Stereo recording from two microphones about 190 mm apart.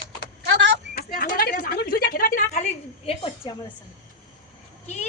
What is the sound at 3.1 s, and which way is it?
Speech, 30° left (ahead or behind).